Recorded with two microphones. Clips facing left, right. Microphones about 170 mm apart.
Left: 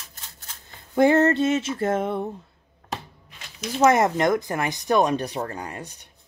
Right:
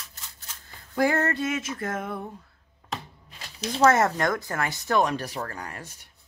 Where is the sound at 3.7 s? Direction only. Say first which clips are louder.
Left 2 dB; 15° left (ahead or behind).